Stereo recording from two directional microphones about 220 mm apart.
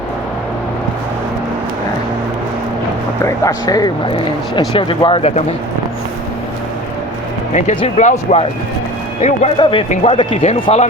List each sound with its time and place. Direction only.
3.2 s speech: 15° left (ahead or behind)
7.5 s speech: 30° left (ahead or behind)